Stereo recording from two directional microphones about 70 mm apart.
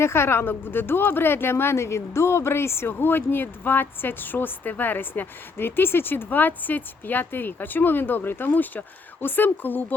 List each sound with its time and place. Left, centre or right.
0.0 s speech: left